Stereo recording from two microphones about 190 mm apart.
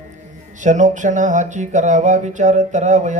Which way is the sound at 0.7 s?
40° right (ahead or behind).